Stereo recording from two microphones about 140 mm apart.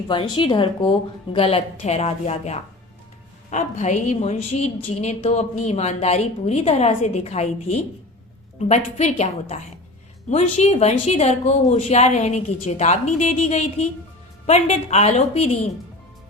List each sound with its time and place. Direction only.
0.1 s a woman's voice: 35° left (ahead or behind); by 15.4 s 50° left (ahead or behind)